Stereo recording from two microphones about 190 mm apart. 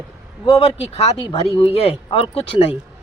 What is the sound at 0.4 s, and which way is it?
Speech, 30° left (ahead or behind).